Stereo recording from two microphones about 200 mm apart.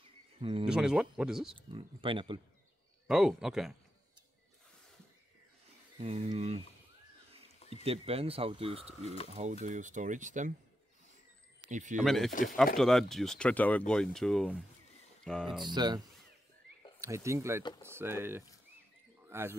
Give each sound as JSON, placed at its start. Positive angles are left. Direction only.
{"t": 0.4, "sound": "speech", "side_deg": -25}
{"t": 0.7, "sound": "speech", "side_deg": -5}
{"t": 1.5, "sound": "speech", "side_deg": -25}
{"t": 3.1, "sound": "speech", "side_deg": -5}
{"t": 5.9, "sound": "speech", "side_deg": -30}
{"t": 7.8, "sound": "speech", "side_deg": -30}
{"t": 11.6, "sound": "speech", "side_deg": -40}
{"t": 12.0, "sound": "speech", "side_deg": 0}
{"t": 12.3, "sound": "speech", "side_deg": 40}
{"t": 12.7, "sound": "speech", "side_deg": 0}
{"t": 15.6, "sound": "speech", "side_deg": -20}
{"t": 17.0, "sound": "speech", "side_deg": -15}
{"t": 19.2, "sound": "a sound", "side_deg": -10}